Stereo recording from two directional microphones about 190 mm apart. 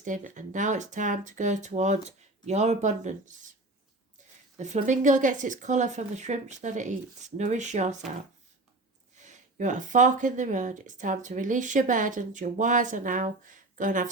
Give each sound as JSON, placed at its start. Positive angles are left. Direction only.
{"t": 0.0, "sound": "speech", "side_deg": -40}
{"t": 4.5, "sound": "speech", "side_deg": -40}
{"t": 9.2, "sound": "speech", "side_deg": -40}